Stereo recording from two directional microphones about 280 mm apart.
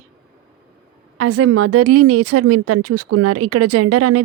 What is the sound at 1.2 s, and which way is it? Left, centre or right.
Speech, right.